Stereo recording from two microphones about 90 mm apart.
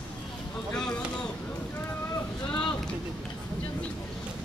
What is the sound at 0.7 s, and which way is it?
Vehicle, 10° left (ahead or behind).